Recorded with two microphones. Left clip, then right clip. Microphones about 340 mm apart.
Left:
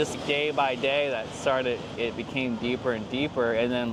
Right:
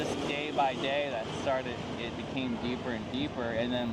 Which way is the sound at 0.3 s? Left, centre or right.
Left.